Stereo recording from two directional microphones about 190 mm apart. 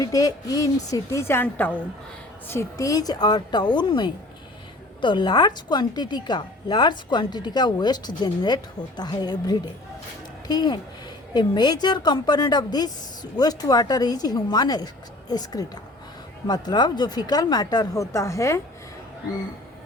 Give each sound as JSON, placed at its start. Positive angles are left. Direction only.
{"t": 0.0, "sound": "a woman's voice", "side_deg": 20}